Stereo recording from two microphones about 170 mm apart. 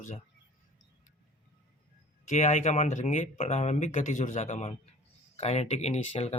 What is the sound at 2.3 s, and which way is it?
Speech, 45° left (ahead or behind).